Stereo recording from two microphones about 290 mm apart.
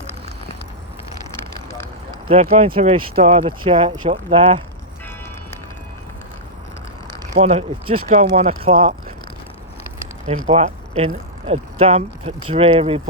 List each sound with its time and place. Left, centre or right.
2.3 s speech: right
7.3 s speech: right
10.2 s speech: right